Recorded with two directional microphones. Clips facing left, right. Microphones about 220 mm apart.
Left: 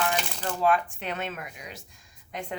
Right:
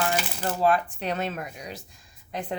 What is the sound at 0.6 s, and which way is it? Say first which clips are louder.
Speech: right 1 dB; 35° right (ahead or behind).